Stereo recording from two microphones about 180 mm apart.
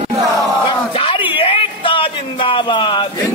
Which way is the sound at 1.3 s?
30° left (ahead or behind).